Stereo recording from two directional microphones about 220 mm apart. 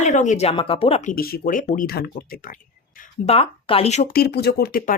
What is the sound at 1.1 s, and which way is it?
A woman's voice, 40° left (ahead or behind).